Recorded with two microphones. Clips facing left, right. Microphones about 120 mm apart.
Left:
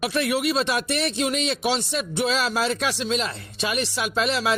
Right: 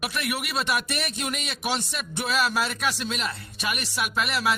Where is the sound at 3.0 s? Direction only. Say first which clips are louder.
Left 5 dB; 25° left (ahead or behind).